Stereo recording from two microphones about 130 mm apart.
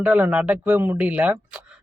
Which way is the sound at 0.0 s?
10° right (ahead or behind).